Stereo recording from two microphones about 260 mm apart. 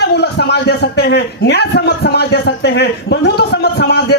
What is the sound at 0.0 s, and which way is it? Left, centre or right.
A man's voice, left.